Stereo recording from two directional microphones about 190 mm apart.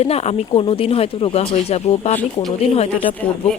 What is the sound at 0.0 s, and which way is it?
Speech, 35° left (ahead or behind).